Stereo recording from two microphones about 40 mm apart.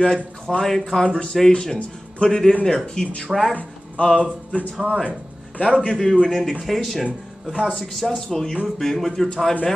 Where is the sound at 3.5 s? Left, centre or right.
Left.